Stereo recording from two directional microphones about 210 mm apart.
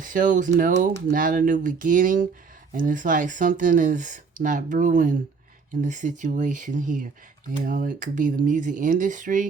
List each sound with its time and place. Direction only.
0.0 s speech: 40° right (ahead or behind)